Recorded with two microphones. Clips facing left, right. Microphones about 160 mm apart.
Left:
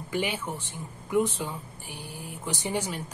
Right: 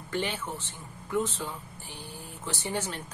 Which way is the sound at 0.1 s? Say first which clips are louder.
Left 2 dB; 10° left (ahead or behind).